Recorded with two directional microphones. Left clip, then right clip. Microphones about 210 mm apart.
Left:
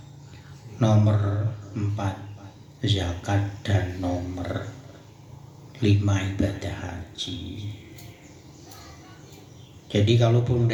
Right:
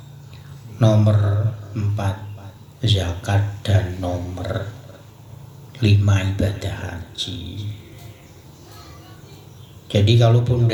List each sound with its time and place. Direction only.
0.8 s speech: 50° right (ahead or behind)
5.7 s speech: 50° right (ahead or behind)
9.9 s speech: 45° right (ahead or behind)